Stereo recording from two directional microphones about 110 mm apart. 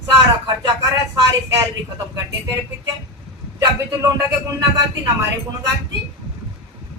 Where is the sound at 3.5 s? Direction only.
30° right (ahead or behind).